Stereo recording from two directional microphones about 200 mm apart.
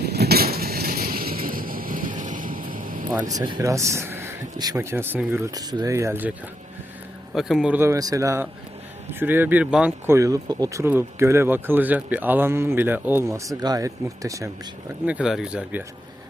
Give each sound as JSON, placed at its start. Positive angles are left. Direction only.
{"t": 0.0, "sound": "a sound", "side_deg": -55}
{"t": 3.2, "sound": "speech", "side_deg": -20}
{"t": 7.3, "sound": "speech", "side_deg": 0}
{"t": 15.0, "sound": "speech", "side_deg": -5}